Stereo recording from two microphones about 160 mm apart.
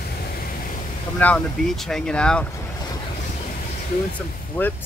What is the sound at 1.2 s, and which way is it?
Speech, 5° left (ahead or behind).